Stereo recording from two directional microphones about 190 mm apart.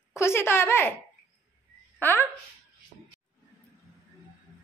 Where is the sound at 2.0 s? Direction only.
10° left (ahead or behind).